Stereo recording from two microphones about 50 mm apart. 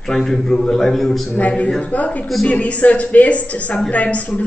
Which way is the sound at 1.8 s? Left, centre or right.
Left.